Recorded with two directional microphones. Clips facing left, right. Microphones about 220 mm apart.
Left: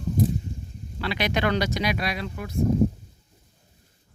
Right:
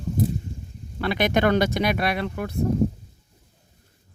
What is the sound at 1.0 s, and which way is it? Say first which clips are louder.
Speech: right 5 dB; 50° right (ahead or behind).